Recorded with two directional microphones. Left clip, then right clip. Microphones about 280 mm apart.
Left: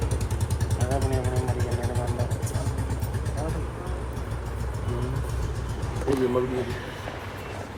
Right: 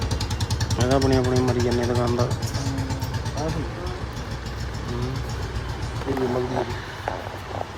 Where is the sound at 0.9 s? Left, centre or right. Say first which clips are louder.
Right 8 dB; right.